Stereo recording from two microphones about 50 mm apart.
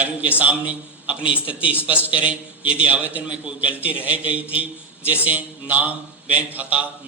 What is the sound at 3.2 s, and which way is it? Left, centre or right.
A man's voice, centre.